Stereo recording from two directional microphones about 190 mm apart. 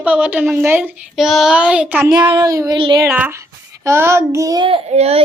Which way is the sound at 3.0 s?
10° right (ahead or behind).